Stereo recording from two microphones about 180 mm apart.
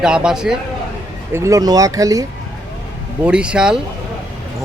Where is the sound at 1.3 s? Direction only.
15° right (ahead or behind).